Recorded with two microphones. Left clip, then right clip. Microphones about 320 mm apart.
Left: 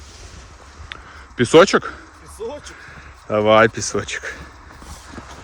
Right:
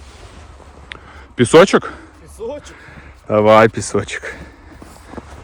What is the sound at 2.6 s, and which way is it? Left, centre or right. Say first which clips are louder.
Speech: even; centre.